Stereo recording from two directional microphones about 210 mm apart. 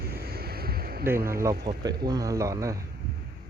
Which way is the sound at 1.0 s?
10° right (ahead or behind).